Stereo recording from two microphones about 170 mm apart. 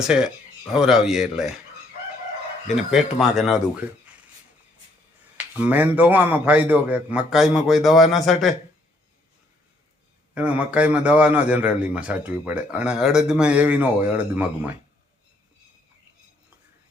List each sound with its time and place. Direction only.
0.0 s speech: 5° right (ahead or behind)
2.9 s speech: centre (ahead or behind)
5.5 s a man's voice: 10° right (ahead or behind)
10.3 s a man's voice: 10° right (ahead or behind)